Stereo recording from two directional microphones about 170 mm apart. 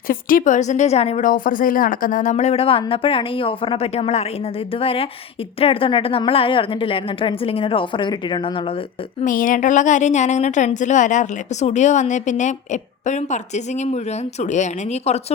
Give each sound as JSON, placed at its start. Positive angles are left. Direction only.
{"t": 0.1, "sound": "a woman's voice", "side_deg": 55}
{"t": 1.3, "sound": "a woman's voice", "side_deg": 55}
{"t": 9.2, "sound": "a woman's voice", "side_deg": 50}